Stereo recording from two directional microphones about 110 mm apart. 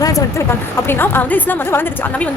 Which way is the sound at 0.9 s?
20° left (ahead or behind).